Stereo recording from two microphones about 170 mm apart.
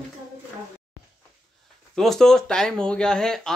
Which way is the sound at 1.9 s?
Centre (ahead or behind).